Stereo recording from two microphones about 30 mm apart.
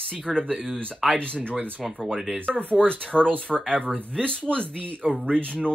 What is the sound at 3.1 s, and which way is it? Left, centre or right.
Speech, right.